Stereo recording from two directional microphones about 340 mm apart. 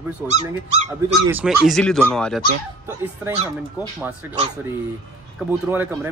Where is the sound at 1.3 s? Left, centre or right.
Centre.